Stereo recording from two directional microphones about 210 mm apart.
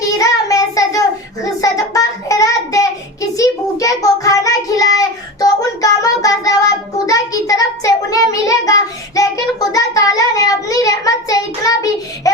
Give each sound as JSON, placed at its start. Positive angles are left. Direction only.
{"t": 0.2, "sound": "child singing", "side_deg": 15}